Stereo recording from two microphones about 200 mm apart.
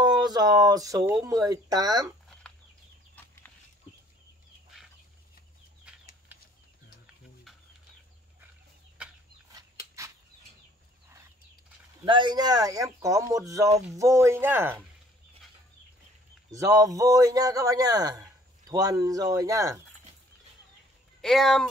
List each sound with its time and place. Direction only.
0.0 s speech: 20° right (ahead or behind)
3.2 s a sound: 10° left (ahead or behind)
12.0 s a man's voice: 20° right (ahead or behind)
16.5 s a man's voice: 15° right (ahead or behind)
21.2 s speech: centre (ahead or behind)